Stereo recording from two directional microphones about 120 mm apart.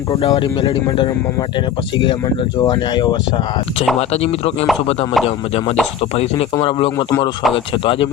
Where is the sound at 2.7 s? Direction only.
40° left (ahead or behind).